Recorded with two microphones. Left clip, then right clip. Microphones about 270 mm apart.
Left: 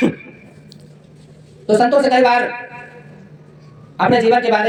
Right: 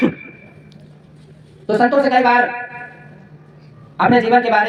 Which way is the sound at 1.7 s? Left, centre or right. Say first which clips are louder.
Left 2 dB; centre.